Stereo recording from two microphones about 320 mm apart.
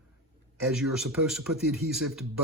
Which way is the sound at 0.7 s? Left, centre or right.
Centre.